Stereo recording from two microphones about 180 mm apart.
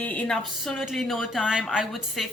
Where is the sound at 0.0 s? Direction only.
10° left (ahead or behind).